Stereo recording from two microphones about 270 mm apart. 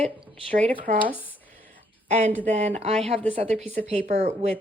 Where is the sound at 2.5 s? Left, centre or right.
Right.